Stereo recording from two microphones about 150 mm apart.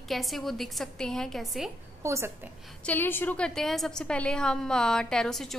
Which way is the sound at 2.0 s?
20° right (ahead or behind).